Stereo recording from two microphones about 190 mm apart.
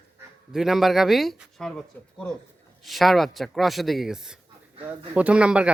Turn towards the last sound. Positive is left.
turn(degrees=-5)  # may be behind; listen again after turning